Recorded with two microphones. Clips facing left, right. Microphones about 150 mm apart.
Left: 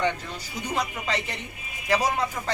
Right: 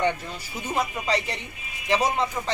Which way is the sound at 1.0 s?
35° right (ahead or behind).